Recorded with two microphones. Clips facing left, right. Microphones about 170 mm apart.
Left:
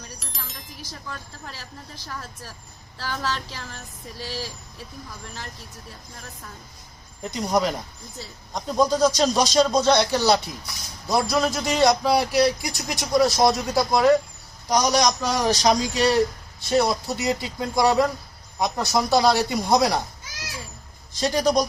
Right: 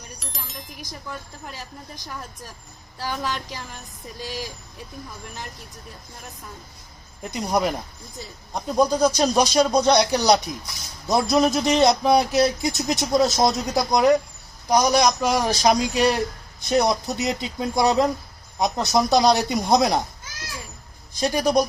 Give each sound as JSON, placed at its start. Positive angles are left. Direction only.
{"t": 0.2, "sound": "a sound", "side_deg": 0}
{"t": 0.8, "sound": "speech", "side_deg": -15}
{"t": 7.3, "sound": "speech", "side_deg": -10}
{"t": 21.1, "sound": "speech", "side_deg": -10}